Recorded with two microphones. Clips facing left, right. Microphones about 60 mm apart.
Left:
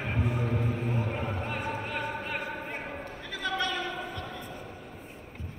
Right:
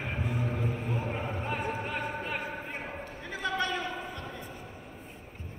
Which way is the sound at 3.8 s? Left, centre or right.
Left.